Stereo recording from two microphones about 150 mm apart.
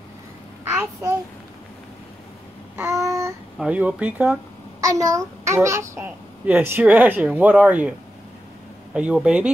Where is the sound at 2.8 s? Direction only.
20° right (ahead or behind).